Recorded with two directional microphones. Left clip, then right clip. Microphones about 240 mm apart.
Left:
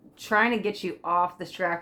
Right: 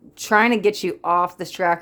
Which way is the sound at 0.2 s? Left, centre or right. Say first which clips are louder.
Right 7 dB; right.